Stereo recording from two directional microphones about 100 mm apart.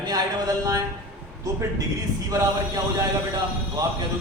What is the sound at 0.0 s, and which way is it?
Speech, 40° right (ahead or behind).